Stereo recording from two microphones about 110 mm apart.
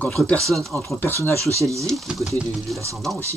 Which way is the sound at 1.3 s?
30° right (ahead or behind).